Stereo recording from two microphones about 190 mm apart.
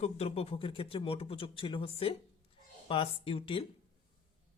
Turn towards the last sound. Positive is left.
turn(degrees=30)  # may be behind; listen again after turning